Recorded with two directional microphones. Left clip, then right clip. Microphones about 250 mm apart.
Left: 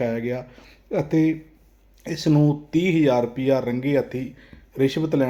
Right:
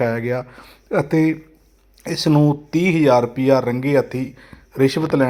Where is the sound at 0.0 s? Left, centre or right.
Centre.